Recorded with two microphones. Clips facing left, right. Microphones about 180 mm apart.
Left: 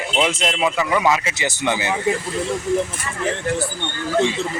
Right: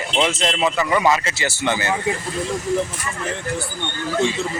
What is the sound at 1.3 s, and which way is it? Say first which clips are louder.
Speech: even; 15° left (ahead or behind).